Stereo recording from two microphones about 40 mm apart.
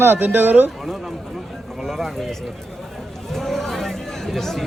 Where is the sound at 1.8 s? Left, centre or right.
Centre.